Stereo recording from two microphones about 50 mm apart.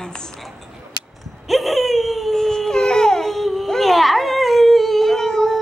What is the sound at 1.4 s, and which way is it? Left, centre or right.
Baby cry, centre.